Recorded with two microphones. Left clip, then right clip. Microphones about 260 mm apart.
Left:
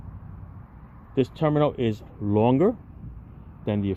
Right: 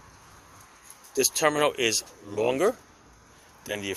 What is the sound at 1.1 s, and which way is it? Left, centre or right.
Speech, centre.